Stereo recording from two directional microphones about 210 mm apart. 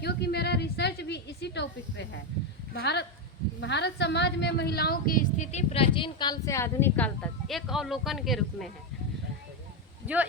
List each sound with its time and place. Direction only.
0.0 s a sound: 50° left (ahead or behind)
2.7 s a woman's voice: 50° left (ahead or behind); by 8.7 s centre (ahead or behind)
10.0 s speech: 10° right (ahead or behind)